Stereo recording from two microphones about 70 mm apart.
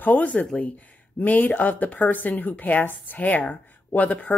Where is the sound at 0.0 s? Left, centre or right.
Left.